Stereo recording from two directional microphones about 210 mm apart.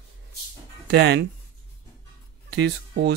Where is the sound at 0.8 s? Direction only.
55° right (ahead or behind).